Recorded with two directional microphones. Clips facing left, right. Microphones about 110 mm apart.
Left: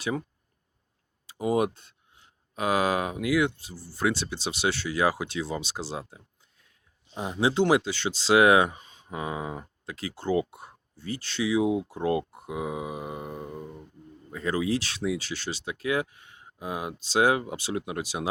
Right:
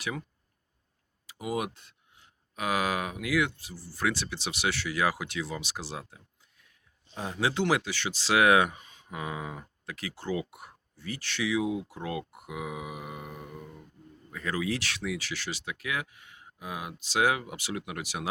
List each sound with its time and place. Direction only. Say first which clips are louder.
1.3 s speech: left 7 dB; 35° left (ahead or behind)